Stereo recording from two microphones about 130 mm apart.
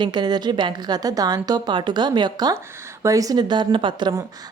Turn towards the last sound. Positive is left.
turn(degrees=-35)  # may be behind; listen again after turning